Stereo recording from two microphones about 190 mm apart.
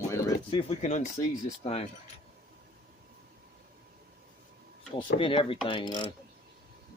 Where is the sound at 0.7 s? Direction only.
40° left (ahead or behind).